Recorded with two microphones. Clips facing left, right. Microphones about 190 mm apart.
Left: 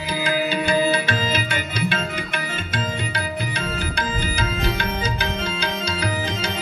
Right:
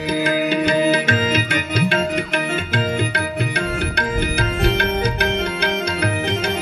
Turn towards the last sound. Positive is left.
turn(degrees=-65)  # may be behind; listen again after turning